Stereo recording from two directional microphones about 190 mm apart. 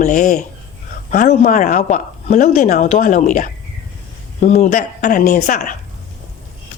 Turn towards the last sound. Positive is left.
turn(degrees=40)  # may be behind; listen again after turning